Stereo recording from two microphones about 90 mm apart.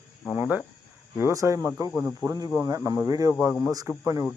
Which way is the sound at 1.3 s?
35° right (ahead or behind).